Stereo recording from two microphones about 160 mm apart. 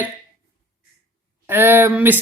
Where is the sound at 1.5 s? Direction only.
15° right (ahead or behind).